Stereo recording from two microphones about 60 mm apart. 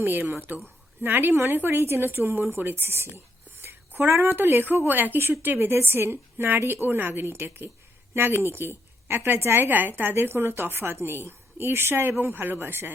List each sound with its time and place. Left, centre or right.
0.0 s a woman's voice: right
4.3 s a woman's voice: right